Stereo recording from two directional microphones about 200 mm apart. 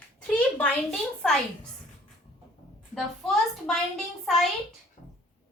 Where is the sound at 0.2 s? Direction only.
5° left (ahead or behind).